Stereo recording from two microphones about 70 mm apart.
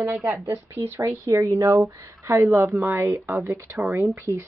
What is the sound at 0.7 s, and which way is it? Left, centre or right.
Speech, right.